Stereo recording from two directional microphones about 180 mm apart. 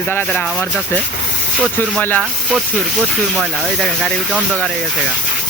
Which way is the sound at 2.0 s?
10° left (ahead or behind).